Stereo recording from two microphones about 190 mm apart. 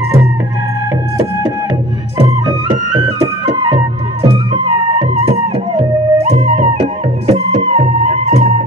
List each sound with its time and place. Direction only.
2.1 s music: 20° right (ahead or behind); by 8.6 s 40° right (ahead or behind)